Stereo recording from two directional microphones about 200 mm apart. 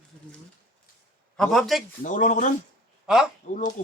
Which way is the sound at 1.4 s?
Centre (ahead or behind).